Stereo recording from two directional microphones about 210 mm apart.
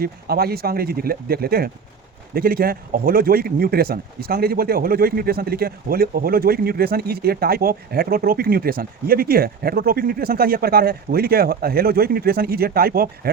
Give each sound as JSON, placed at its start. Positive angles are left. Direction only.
{"t": 0.0, "sound": "speech", "side_deg": -45}